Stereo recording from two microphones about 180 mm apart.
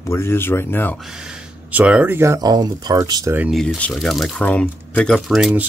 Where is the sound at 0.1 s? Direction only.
15° left (ahead or behind).